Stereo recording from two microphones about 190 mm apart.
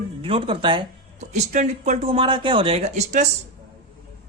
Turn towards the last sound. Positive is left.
turn(degrees=-35)  # may be behind; listen again after turning